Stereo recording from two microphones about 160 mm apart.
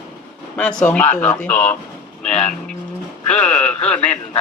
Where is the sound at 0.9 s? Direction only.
10° left (ahead or behind).